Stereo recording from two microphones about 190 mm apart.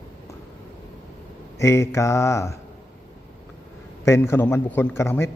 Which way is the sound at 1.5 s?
15° left (ahead or behind).